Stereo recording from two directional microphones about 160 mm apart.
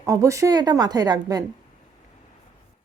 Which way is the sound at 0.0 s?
20° right (ahead or behind).